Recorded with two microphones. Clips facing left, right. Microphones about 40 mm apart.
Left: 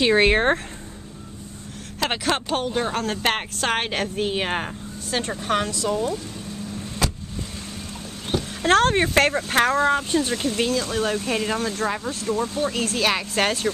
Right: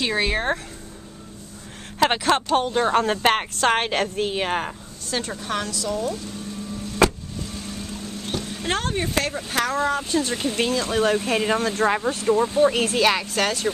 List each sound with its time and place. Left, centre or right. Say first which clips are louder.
0.2 s speech: left 5 dB; left
2.2 s a woman's voice: right 4 dB; centre
2.9 s a woman's voice: right 4 dB; centre
8.3 s a sound: left 5 dB; centre
8.6 s speech: left 8 dB; left
9.0 s speech: left 6 dB; left
9.5 s speech: left 4 dB; left
9.9 s speech: left 1 dB; centre
10.4 s speech: even; centre
13.3 s a woman's voice: left 1 dB; left